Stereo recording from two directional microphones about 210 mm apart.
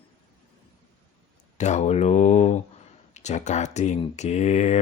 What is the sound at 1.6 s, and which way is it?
Speech, 35° left (ahead or behind).